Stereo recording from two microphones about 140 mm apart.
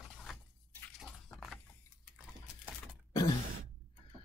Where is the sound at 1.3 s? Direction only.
Centre (ahead or behind).